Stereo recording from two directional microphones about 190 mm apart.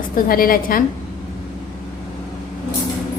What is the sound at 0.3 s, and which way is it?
Speech, 50° left (ahead or behind).